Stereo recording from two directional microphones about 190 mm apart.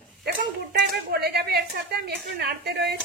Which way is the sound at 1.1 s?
55° right (ahead or behind).